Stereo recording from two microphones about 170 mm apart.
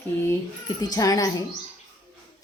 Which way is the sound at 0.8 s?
20° left (ahead or behind).